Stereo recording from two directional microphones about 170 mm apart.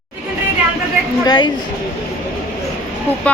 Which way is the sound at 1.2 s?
25° left (ahead or behind).